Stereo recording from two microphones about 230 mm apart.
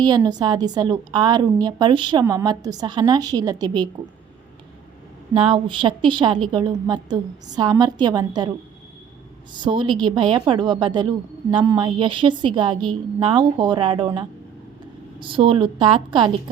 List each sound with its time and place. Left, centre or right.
0.0 s a woman's voice: centre
5.3 s a woman's voice: right